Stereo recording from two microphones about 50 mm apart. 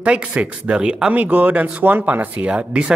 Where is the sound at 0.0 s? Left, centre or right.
Right.